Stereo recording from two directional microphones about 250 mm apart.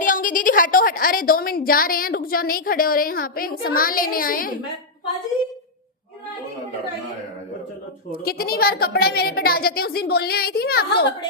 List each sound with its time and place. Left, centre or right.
0.0 s a woman's voice: left
8.1 s speech: left